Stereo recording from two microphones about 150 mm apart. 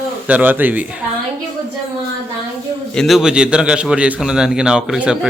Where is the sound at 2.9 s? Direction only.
Centre (ahead or behind).